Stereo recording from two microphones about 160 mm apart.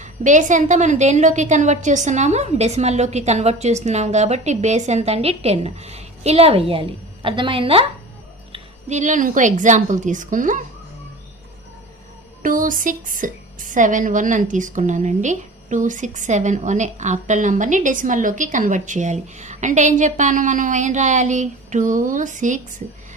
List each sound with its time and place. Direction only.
0.0 s a woman's voice: 50° right (ahead or behind); by 7.9 s 35° right (ahead or behind)
8.5 s a woman's voice: 45° right (ahead or behind)
12.4 s a woman's voice: 55° right (ahead or behind)